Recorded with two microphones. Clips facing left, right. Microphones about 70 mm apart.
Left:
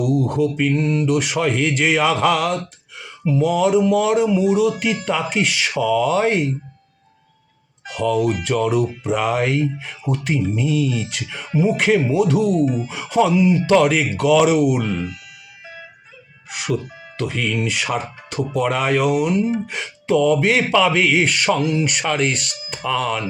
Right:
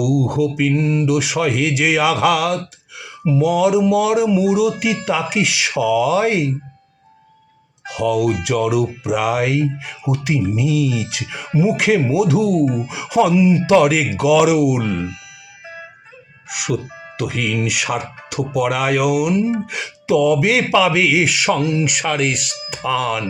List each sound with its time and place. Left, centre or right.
0.0 s speech: centre
7.9 s speech: centre
15.6 s music: right
16.5 s speech: centre